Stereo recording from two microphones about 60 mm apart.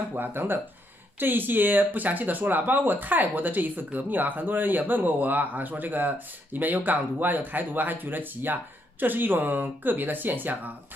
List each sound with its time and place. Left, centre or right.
0.1 s speech: right